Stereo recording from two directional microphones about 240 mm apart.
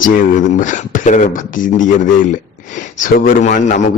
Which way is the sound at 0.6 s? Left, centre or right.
Left.